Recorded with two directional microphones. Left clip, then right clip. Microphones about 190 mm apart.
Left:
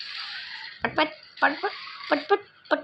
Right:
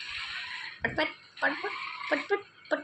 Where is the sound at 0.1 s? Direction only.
5° right (ahead or behind).